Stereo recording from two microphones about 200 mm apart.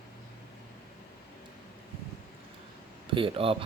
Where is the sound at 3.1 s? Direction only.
25° right (ahead or behind).